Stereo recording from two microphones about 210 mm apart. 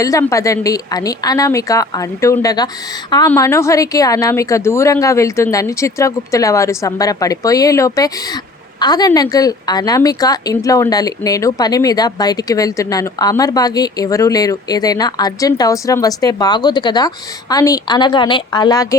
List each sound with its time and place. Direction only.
0.0 s a woman's voice: 15° left (ahead or behind)